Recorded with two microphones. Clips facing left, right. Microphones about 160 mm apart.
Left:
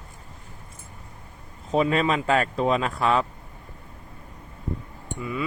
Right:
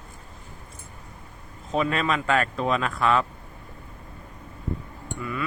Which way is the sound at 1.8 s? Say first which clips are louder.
Left 3 dB; 30° left (ahead or behind).